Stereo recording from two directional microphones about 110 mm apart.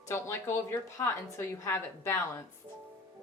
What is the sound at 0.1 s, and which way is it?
A woman's voice, 25° left (ahead or behind).